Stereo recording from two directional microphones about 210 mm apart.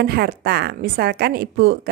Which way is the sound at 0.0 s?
50° right (ahead or behind).